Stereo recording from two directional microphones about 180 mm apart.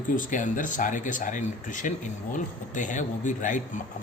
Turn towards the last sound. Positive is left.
turn(degrees=45)  # may be behind; listen again after turning